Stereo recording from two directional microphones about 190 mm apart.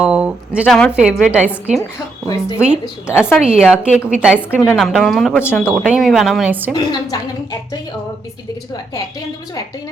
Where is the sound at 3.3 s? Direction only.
5° right (ahead or behind).